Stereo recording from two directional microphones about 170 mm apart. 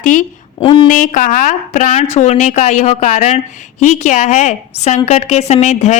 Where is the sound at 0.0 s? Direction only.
50° left (ahead or behind).